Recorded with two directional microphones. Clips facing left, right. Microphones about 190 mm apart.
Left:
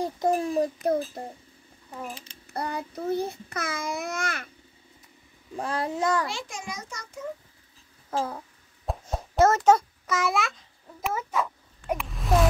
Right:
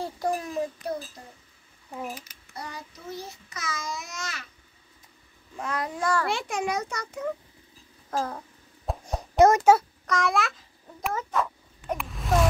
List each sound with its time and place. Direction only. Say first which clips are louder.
0.0 s a child's voice: left 4 dB; 20° left (ahead or behind)
0.8 s child singing: left 7 dB; 55° left (ahead or behind)
1.9 s speech: right 2 dB; 10° right (ahead or behind)
2.5 s child singing: left 8 dB; 60° left (ahead or behind)
5.6 s a child's voice: left 2 dB; 30° left (ahead or behind)
6.2 s a child's voice: right 7 dB; 60° right (ahead or behind)
8.2 s a sound: left 1 dB; 5° left (ahead or behind)
9.4 s a child's voice: right 2 dB; 10° right (ahead or behind)
10.0 s speech: right 1 dB; 5° left (ahead or behind)
11.9 s a sound: left 1 dB; centre (ahead or behind)